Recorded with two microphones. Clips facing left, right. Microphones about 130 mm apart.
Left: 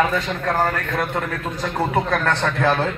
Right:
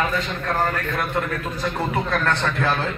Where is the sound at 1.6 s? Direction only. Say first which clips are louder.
Left 4 dB; 65° left (ahead or behind).